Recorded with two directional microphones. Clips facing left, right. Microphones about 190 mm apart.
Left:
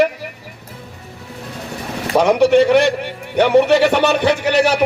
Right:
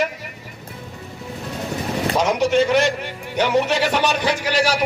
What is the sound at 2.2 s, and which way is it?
A man's voice, 60° left (ahead or behind).